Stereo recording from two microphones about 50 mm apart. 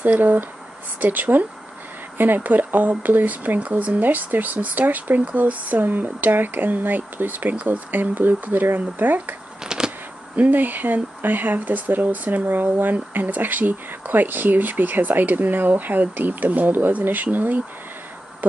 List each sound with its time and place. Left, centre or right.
0.0 s speech: right
9.7 s a sound: centre
10.3 s speech: right